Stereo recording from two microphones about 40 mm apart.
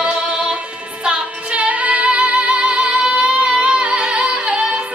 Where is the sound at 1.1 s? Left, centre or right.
Right.